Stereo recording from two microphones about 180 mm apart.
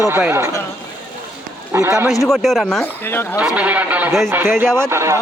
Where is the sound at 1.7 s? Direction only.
15° right (ahead or behind).